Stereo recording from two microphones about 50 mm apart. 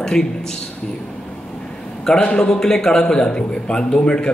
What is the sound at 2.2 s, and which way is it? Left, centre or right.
A man's voice, centre.